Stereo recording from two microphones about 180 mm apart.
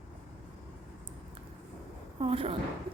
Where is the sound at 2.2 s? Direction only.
30° right (ahead or behind).